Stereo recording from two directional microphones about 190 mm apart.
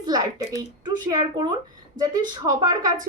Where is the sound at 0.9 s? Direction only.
20° right (ahead or behind).